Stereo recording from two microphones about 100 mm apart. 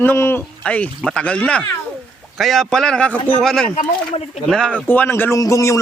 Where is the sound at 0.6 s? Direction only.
10° left (ahead or behind).